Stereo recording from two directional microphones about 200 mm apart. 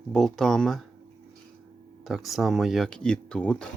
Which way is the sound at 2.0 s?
Centre (ahead or behind).